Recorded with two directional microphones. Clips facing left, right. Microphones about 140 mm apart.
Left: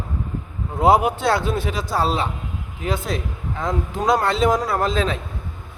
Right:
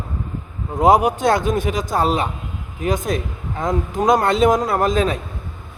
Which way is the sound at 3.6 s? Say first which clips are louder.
Right 4 dB; 20° right (ahead or behind).